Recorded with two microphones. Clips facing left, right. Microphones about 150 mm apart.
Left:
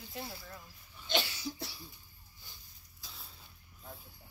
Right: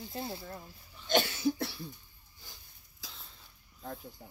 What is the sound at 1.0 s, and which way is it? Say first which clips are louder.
Cough: right 7 dB; 50° right (ahead or behind).